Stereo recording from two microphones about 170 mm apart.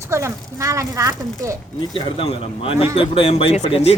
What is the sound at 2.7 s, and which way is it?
Speech, 35° left (ahead or behind).